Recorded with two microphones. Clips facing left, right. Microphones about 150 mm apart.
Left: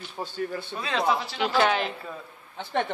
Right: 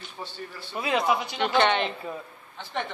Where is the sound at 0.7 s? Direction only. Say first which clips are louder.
Right 4 dB; 20° right (ahead or behind).